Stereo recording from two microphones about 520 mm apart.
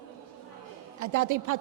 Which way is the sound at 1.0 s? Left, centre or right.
Right.